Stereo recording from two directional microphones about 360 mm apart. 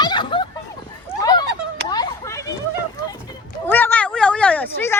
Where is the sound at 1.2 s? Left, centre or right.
Centre.